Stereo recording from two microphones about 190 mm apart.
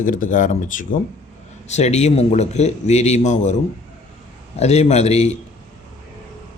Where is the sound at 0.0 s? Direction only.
45° left (ahead or behind).